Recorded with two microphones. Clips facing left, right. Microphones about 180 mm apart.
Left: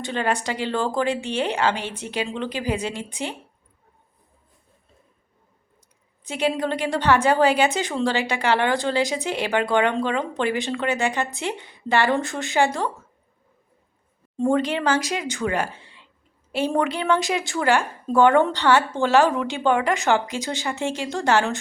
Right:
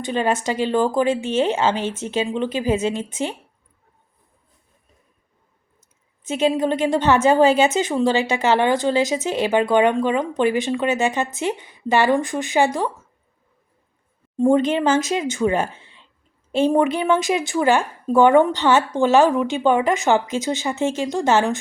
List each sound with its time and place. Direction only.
0.0 s a woman's voice: 20° right (ahead or behind)
6.2 s a woman's voice: 20° right (ahead or behind)
14.3 s a woman's voice: 20° right (ahead or behind)